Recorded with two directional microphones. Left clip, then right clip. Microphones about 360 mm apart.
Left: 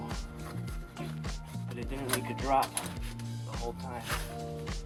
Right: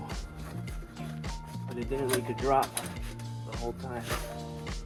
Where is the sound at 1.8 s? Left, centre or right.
Centre.